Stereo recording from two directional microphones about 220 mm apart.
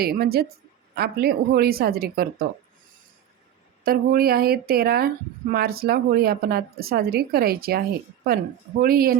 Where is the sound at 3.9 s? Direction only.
45° right (ahead or behind).